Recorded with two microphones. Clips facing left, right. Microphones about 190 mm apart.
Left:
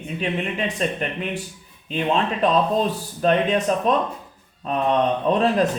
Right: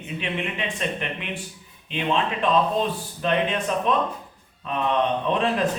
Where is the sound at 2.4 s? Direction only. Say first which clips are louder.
Left 2 dB; 40° left (ahead or behind).